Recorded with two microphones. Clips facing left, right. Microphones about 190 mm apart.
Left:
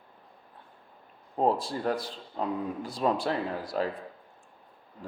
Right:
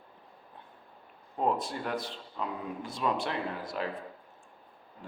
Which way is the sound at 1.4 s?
30° left (ahead or behind).